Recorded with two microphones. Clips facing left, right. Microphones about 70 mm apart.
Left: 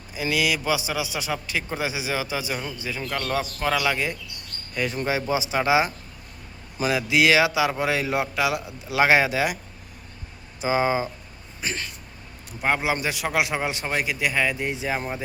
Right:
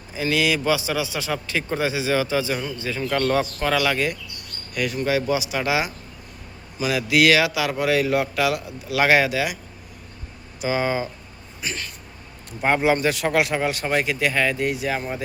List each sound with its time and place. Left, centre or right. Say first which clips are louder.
0.2 s a man's voice: right 3 dB; centre
3.0 s speech: right 6 dB; centre
4.7 s speech: right 3 dB; left
7.1 s speech: right 2 dB; centre
10.6 s speech: left 1 dB; left
11.6 s speech: even; left
12.5 s a man's voice: right 4 dB; centre